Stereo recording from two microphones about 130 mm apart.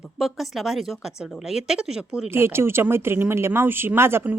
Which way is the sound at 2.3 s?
20° right (ahead or behind).